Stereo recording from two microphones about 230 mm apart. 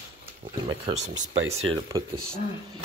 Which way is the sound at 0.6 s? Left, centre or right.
Right.